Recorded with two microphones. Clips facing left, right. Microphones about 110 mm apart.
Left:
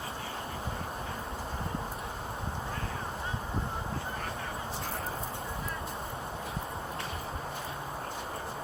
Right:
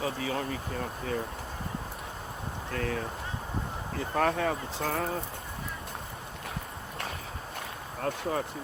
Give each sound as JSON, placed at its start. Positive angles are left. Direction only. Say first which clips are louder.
{"t": 0.0, "sound": "speech", "louder": "right 7 dB", "side_deg": -90}
{"t": 2.7, "sound": "speech", "louder": "right 6 dB", "side_deg": -90}
{"t": 4.2, "sound": "speech", "louder": "right 10 dB", "side_deg": -90}